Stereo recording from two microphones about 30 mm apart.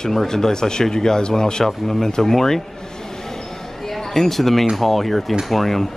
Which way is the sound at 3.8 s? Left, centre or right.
Centre.